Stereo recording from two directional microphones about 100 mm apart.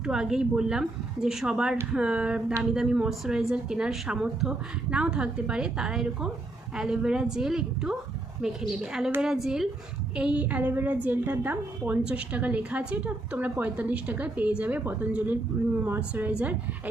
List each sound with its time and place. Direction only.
0.0 s a woman's voice: 5° right (ahead or behind)